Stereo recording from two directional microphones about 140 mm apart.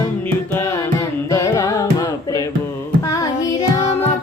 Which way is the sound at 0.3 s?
15° left (ahead or behind).